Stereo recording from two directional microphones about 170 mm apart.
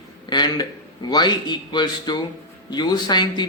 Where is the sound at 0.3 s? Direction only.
25° left (ahead or behind).